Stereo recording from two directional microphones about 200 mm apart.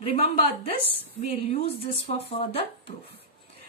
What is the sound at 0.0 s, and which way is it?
A woman's voice, 30° left (ahead or behind).